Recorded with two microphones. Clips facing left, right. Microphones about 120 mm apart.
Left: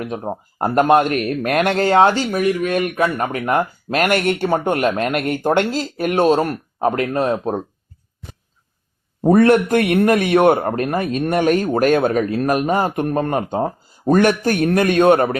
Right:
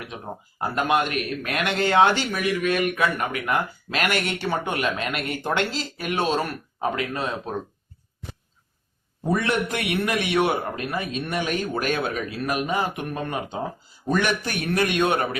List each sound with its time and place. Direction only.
0.0 s a man's voice: 45° left (ahead or behind)
9.2 s a man's voice: 50° left (ahead or behind)